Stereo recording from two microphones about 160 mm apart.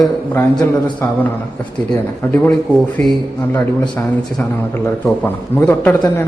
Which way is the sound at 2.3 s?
10° left (ahead or behind).